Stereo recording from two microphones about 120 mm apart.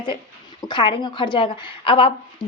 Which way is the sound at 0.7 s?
40° left (ahead or behind).